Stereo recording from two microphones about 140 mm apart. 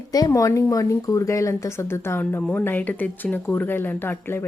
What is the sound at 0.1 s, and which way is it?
Speech, 25° left (ahead or behind).